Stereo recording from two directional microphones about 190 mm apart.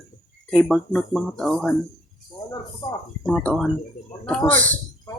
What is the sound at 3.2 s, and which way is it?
Speech, 5° left (ahead or behind).